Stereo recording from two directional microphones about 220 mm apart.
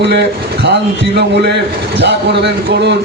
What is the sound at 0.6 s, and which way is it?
A man's voice, 50° right (ahead or behind).